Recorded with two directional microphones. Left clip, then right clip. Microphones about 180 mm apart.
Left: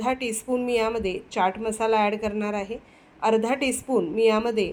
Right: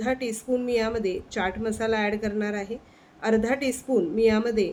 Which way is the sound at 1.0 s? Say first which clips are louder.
Left 3 dB; 10° left (ahead or behind).